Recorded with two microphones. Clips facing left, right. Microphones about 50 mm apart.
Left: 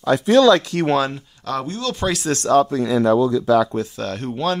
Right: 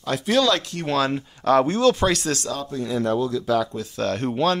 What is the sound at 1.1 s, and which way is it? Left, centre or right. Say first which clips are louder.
Speech: right 8 dB; right.